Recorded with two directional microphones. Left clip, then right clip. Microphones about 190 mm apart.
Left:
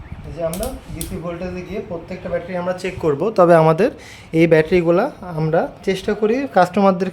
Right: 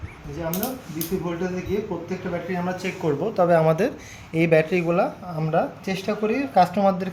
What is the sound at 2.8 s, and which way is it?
A man's voice, 55° left (ahead or behind).